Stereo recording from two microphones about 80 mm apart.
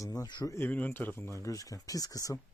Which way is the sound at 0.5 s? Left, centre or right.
Left.